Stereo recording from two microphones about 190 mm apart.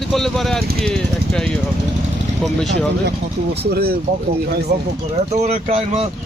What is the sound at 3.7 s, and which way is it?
Speech, 55° right (ahead or behind).